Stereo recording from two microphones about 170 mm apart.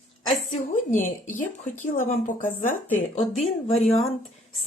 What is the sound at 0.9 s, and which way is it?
Speech, 50° left (ahead or behind).